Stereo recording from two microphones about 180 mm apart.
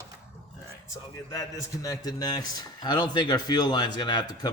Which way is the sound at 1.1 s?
20° left (ahead or behind).